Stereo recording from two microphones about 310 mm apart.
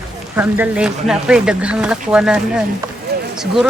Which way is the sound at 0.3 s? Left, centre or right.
Centre.